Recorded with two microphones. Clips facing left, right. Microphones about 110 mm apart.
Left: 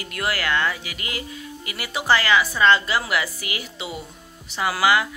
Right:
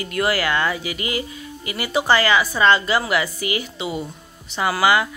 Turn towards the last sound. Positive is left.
turn(degrees=0)  # may be behind; listen again after turning